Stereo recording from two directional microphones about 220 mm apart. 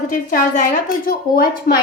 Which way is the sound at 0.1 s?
35° left (ahead or behind).